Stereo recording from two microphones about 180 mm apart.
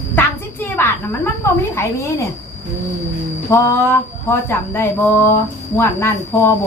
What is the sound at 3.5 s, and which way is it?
A woman's voice, 10° left (ahead or behind).